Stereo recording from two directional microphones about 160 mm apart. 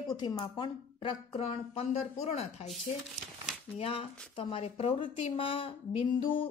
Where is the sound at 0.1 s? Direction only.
25° left (ahead or behind); by 2.7 s 40° left (ahead or behind).